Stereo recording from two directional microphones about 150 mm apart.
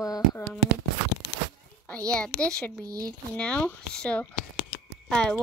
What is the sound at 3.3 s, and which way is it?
A woman's voice, 10° left (ahead or behind).